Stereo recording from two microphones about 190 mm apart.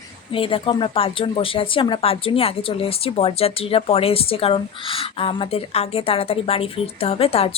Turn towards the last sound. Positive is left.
turn(degrees=30)  # may be behind; listen again after turning